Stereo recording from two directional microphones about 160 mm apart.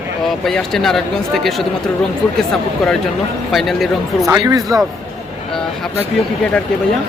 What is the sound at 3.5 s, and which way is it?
Speech, centre (ahead or behind).